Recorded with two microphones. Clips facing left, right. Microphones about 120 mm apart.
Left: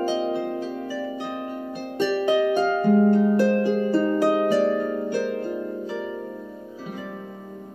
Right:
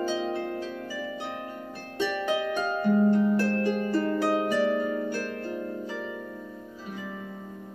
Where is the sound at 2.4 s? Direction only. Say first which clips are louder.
Left 7 dB; 50° left (ahead or behind).